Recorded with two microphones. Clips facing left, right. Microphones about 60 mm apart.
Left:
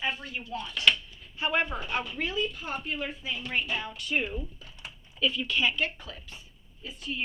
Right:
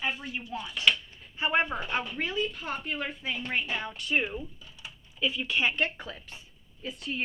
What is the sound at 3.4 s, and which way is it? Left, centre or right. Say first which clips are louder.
Speech: left 1 dB; right.